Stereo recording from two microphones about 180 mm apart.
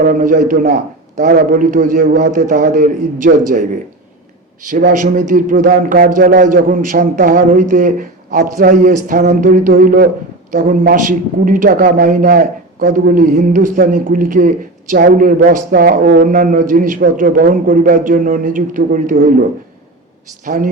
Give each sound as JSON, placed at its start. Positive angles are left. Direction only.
{"t": 0.1, "sound": "a man's voice", "side_deg": -45}
{"t": 4.7, "sound": "a man's voice", "side_deg": -45}